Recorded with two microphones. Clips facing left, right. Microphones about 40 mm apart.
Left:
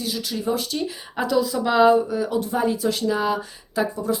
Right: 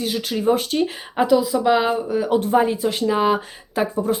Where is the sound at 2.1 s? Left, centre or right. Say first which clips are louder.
Right 6 dB; right.